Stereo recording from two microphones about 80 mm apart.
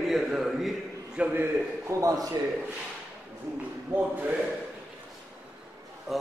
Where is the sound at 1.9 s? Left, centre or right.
Right.